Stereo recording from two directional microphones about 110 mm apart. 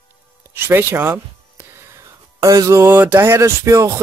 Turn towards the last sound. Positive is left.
turn(degrees=-30)  # may be behind; listen again after turning